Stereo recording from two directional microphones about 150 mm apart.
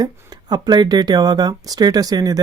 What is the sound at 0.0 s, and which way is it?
Speech, 25° right (ahead or behind).